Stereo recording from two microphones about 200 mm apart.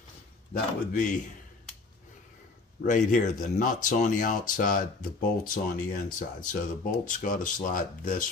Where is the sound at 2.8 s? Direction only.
40° left (ahead or behind).